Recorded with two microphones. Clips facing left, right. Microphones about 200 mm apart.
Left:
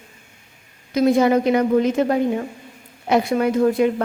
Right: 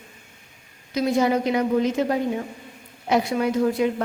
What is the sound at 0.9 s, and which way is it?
A woman's voice, 55° left (ahead or behind).